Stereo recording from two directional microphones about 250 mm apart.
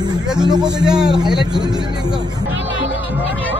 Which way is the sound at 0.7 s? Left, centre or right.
Centre.